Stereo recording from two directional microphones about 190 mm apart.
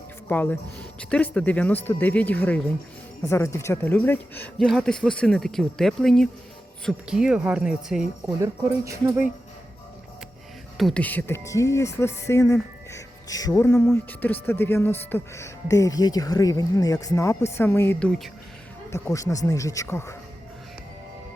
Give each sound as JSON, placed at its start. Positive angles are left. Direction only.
{"t": 0.3, "sound": "speech", "side_deg": 10}
{"t": 8.4, "sound": "speech", "side_deg": -15}
{"t": 10.8, "sound": "speech", "side_deg": 5}